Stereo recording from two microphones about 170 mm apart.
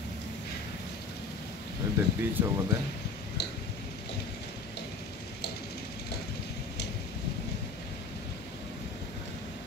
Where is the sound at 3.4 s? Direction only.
75° left (ahead or behind).